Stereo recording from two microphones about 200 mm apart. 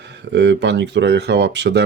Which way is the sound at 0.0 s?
60° right (ahead or behind).